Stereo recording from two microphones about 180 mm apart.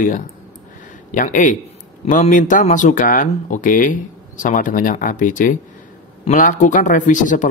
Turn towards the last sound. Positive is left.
turn(degrees=45)  # may be behind; listen again after turning